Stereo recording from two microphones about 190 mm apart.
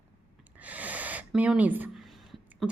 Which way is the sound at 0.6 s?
10° right (ahead or behind).